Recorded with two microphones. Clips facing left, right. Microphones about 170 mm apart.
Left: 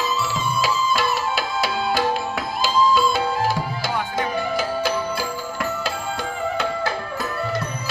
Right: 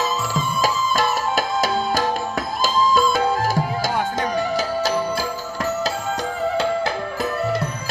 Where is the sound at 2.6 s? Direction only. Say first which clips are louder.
Even; 45° right (ahead or behind).